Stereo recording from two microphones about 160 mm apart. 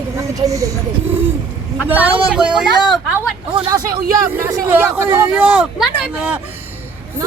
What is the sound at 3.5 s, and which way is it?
Speech, 25° right (ahead or behind).